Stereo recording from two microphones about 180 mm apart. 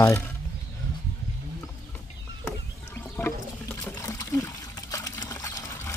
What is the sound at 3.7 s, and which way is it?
Trickle, 15° left (ahead or behind).